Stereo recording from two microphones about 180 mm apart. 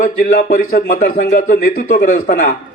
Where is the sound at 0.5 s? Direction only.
45° left (ahead or behind).